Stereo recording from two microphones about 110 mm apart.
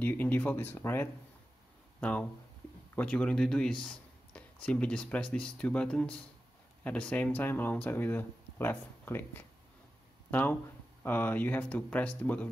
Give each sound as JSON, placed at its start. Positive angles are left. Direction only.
{"t": 0.0, "sound": "speech", "side_deg": 15}